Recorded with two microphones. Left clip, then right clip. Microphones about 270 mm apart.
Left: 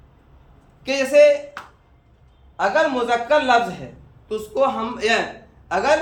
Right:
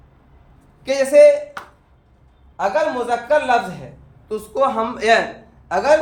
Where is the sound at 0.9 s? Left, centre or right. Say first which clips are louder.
Right 3 dB; right.